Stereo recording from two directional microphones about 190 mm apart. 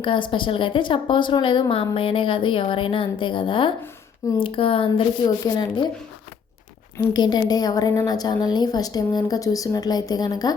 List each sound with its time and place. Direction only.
0.0 s a woman's voice: 25° left (ahead or behind)
6.9 s a woman's voice: 20° left (ahead or behind)